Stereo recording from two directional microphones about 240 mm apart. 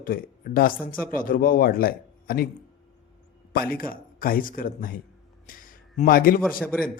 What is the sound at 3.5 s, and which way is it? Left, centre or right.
A man's voice, left.